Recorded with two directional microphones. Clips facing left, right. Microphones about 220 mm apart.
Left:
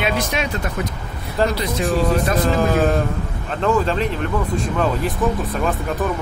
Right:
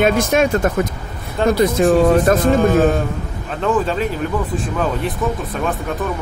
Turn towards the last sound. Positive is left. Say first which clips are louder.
# right 1 dB
turn(degrees=-5)  # may be behind; listen again after turning